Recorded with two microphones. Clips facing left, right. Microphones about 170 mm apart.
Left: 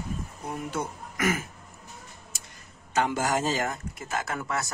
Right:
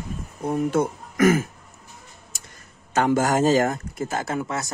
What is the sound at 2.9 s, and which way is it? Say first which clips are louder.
Speech: right 6 dB; 45° right (ahead or behind).